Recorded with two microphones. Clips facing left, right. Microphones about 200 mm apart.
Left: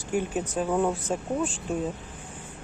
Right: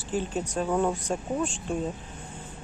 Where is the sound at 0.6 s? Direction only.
Centre (ahead or behind).